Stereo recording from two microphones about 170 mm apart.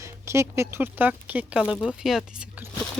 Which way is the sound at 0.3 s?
15° right (ahead or behind).